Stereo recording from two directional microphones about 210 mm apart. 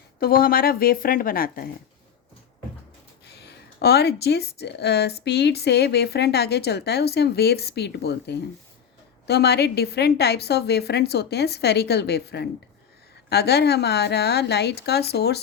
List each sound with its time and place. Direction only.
0.2 s speech: 45° left (ahead or behind)
3.4 s speech: 50° left (ahead or behind)